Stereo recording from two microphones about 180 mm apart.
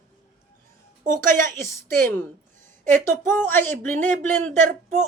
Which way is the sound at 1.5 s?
15° left (ahead or behind).